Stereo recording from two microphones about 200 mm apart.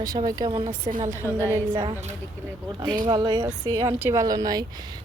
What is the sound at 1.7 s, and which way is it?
Speech, 25° right (ahead or behind).